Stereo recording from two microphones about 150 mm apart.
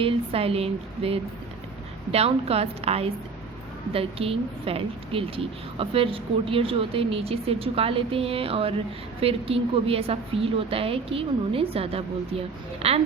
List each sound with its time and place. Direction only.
0.0 s a woman's voice: 40° right (ahead or behind)